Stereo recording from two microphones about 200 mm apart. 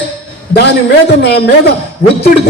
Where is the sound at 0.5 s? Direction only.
55° left (ahead or behind).